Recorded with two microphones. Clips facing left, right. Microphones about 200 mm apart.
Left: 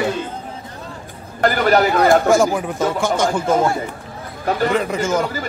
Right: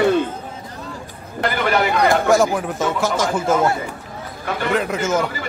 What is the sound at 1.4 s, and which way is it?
Speech, 40° left (ahead or behind).